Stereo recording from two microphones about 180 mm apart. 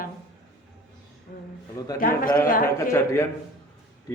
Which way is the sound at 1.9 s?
50° left (ahead or behind).